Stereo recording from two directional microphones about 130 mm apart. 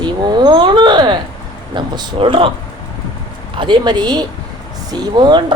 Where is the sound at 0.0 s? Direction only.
35° right (ahead or behind).